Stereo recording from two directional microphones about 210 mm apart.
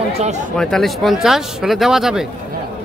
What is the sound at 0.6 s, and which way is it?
Speech, centre (ahead or behind).